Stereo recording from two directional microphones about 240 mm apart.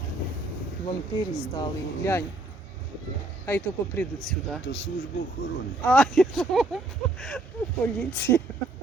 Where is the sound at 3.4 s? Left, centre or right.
Centre.